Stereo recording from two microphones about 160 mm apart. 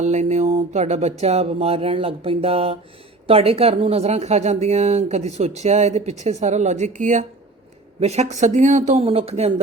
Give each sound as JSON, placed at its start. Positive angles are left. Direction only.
{"t": 0.0, "sound": "a sound", "side_deg": -45}
{"t": 3.2, "sound": "speech", "side_deg": -35}
{"t": 7.9, "sound": "speech", "side_deg": -40}